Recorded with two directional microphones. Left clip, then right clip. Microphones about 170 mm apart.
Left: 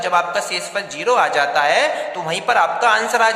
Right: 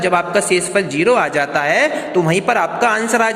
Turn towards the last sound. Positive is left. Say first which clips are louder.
# even
turn(degrees=-20)  # may be behind; listen again after turning